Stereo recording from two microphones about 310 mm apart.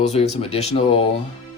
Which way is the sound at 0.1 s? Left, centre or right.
Centre.